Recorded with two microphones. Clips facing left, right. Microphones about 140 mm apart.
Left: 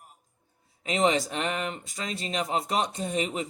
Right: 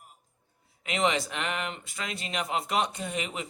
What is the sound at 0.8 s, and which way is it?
A man's voice, 35° left (ahead or behind).